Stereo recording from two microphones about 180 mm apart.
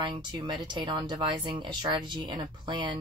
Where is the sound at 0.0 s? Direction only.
25° right (ahead or behind).